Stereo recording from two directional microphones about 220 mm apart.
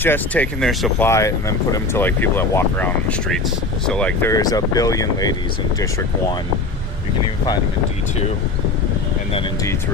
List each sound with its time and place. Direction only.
0.0 s speech: 5° left (ahead or behind)
1.0 s speech: 15° left (ahead or behind)